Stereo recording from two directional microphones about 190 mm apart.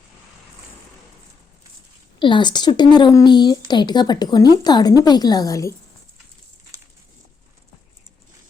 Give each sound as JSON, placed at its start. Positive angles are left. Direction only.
{"t": 2.1, "sound": "speech", "side_deg": 25}